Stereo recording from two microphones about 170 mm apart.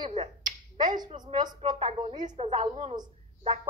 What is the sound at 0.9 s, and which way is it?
Speech, 25° right (ahead or behind).